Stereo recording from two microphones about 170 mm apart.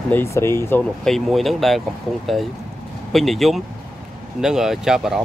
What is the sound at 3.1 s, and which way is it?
Speech, centre (ahead or behind).